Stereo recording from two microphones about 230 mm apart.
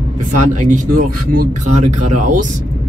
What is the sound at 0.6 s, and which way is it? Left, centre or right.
Speech, right.